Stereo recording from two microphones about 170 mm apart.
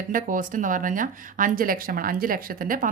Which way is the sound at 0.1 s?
55° right (ahead or behind).